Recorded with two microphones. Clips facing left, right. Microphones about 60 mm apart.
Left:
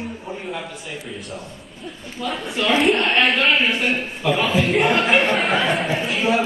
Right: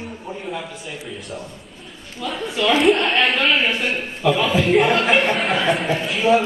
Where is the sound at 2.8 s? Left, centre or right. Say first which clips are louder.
Even; centre.